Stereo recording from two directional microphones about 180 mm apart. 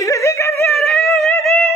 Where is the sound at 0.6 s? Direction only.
Centre (ahead or behind).